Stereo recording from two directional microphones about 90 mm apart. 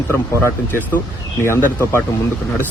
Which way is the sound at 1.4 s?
30° left (ahead or behind).